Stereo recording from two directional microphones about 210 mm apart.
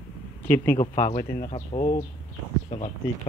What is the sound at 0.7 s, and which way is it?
Speech, 35° left (ahead or behind).